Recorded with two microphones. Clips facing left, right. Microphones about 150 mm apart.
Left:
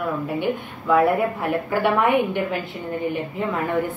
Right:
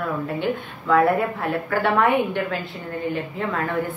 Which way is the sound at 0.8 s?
15° left (ahead or behind).